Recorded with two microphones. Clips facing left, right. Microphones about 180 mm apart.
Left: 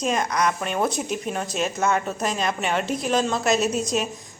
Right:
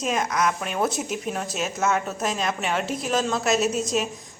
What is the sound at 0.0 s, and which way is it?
Speech, 5° right (ahead or behind).